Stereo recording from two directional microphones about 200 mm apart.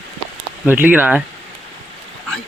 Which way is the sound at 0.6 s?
10° right (ahead or behind).